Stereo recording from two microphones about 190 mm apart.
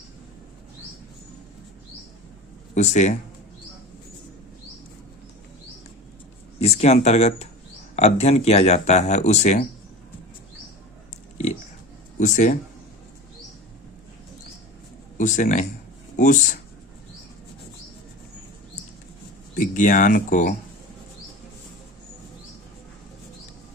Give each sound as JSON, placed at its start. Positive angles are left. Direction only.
{"t": 2.7, "sound": "speech", "side_deg": 40}
{"t": 6.6, "sound": "speech", "side_deg": 35}
{"t": 12.2, "sound": "speech", "side_deg": 40}
{"t": 15.2, "sound": "speech", "side_deg": 40}
{"t": 19.5, "sound": "speech", "side_deg": 40}